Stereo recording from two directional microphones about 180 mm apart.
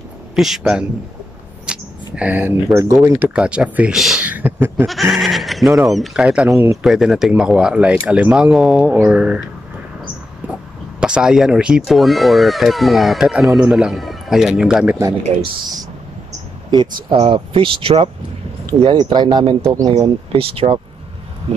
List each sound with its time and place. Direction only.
0.4 s speech: 5° right (ahead or behind)
5.1 s speech: centre (ahead or behind)
11.0 s speech: 5° right (ahead or behind)
15.2 s speech: 25° right (ahead or behind)
17.1 s speech: 30° right (ahead or behind)